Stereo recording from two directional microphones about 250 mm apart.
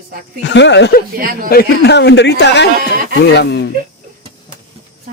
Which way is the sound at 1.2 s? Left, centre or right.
Right.